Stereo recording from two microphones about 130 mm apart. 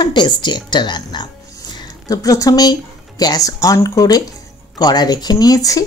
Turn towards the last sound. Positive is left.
turn(degrees=25)  # may be behind; listen again after turning